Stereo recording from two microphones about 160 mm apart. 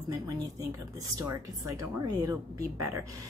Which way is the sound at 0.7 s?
20° right (ahead or behind).